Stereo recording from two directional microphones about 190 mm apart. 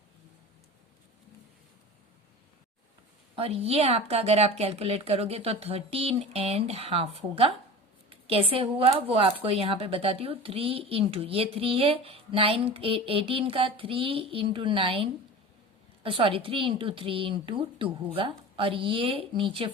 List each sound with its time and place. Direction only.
3.3 s speech: 30° right (ahead or behind)
16.0 s speech: 30° right (ahead or behind)